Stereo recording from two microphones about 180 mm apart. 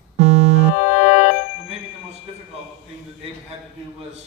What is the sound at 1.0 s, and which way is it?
Music, 70° left (ahead or behind).